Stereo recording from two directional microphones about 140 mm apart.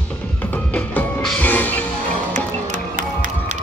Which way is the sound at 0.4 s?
10° left (ahead or behind).